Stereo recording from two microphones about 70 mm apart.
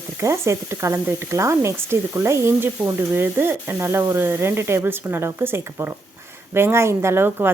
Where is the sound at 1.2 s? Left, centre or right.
Right.